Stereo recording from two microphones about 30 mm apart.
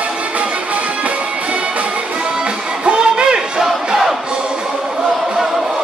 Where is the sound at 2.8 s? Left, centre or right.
Right.